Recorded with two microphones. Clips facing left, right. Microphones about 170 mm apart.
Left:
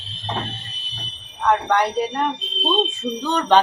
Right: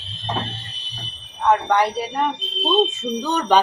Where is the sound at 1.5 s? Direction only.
5° right (ahead or behind).